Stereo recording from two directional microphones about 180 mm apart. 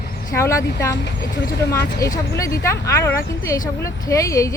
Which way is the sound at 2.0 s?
15° left (ahead or behind).